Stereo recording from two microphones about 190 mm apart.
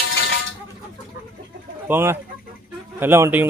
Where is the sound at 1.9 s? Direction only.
15° right (ahead or behind).